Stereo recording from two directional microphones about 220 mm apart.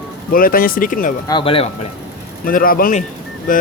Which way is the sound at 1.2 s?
20° left (ahead or behind).